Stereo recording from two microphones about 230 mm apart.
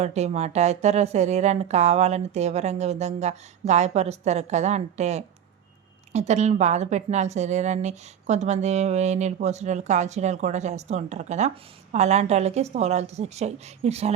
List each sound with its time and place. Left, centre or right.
0.0 s a woman's voice: right